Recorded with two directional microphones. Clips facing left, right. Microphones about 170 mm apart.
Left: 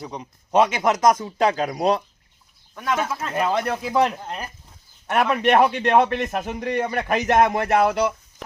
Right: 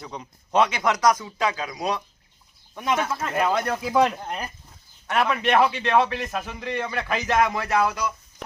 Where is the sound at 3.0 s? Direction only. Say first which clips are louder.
Left 1 dB; 5° left (ahead or behind).